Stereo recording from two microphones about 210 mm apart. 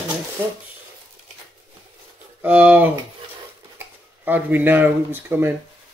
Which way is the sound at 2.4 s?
5° right (ahead or behind).